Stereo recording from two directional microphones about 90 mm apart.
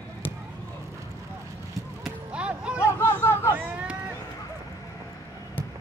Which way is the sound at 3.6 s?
15° right (ahead or behind).